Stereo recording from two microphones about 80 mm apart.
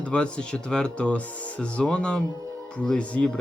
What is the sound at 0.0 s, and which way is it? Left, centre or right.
Speech, centre.